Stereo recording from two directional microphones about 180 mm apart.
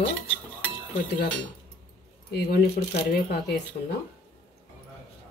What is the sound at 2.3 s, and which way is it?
Speech, 60° left (ahead or behind).